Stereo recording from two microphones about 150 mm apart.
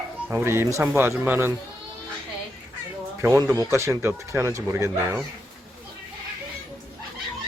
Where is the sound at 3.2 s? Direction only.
20° right (ahead or behind).